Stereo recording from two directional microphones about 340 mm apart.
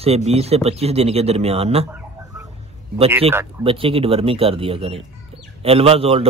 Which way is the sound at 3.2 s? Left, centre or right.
Centre.